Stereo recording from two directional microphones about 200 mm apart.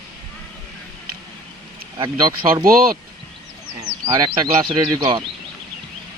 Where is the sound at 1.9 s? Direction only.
25° right (ahead or behind).